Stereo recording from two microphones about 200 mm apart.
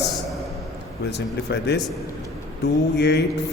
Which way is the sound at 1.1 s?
60° left (ahead or behind).